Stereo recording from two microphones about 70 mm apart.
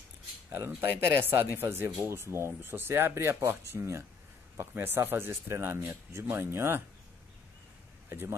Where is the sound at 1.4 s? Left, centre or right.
Right.